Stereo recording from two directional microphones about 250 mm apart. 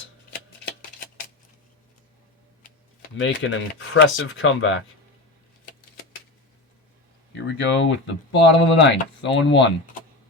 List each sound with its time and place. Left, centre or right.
0.8 s a sound: left
3.2 s speech: left
7.4 s speech: left